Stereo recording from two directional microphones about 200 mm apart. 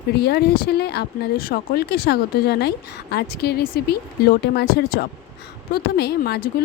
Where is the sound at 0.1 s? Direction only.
55° left (ahead or behind).